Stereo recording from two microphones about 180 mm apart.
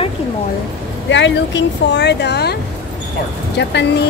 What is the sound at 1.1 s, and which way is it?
Speech, 85° left.